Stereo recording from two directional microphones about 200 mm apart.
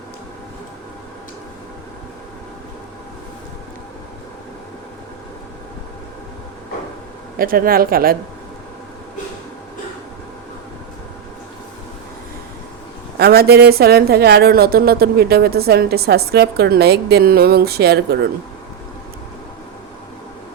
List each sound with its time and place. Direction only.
7.3 s a woman's voice: 45° right (ahead or behind)
13.1 s a woman's voice: 50° right (ahead or behind)